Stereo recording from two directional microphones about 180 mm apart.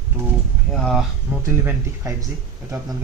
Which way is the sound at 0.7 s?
Centre (ahead or behind).